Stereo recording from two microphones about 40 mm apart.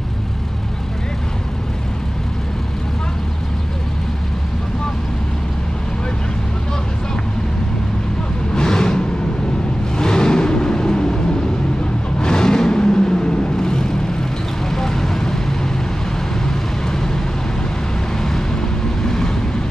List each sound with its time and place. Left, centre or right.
8.5 s vehicle: centre
12.2 s vehicle: centre
18.2 s vehicle: centre